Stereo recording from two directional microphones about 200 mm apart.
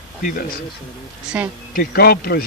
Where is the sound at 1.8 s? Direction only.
50° left (ahead or behind).